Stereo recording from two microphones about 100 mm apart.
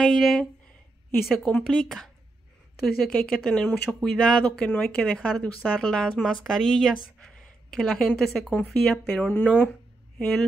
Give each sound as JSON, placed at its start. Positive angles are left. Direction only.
{"t": 0.0, "sound": "a woman's voice", "side_deg": 5}
{"t": 9.3, "sound": "speech", "side_deg": 20}